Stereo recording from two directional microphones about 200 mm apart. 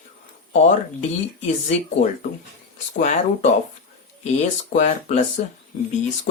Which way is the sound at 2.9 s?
35° left (ahead or behind).